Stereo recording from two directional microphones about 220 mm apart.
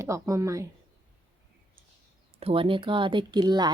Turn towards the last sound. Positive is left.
turn(degrees=-20)  # may be behind; listen again after turning